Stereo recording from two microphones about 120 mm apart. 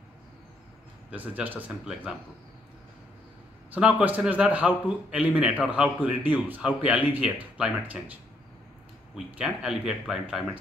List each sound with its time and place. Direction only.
1.1 s a man's voice: 15° right (ahead or behind)
3.7 s a man's voice: 15° right (ahead or behind)